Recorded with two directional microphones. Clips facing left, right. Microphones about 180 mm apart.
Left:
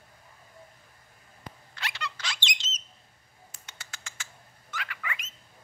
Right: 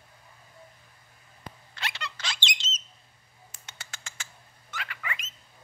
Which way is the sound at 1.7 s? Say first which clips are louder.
Even; 25° right (ahead or behind).